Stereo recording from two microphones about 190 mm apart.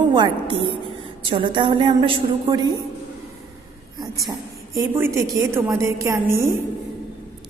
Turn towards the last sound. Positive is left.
turn(degrees=-15)  # may be behind; listen again after turning